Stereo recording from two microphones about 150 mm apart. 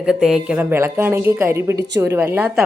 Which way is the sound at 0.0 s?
5° right (ahead or behind).